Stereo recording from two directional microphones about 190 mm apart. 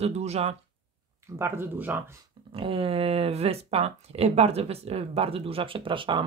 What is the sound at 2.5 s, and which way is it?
Speech, 30° right (ahead or behind).